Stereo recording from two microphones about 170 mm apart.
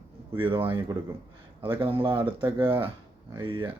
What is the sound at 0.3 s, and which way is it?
Speech, 30° right (ahead or behind).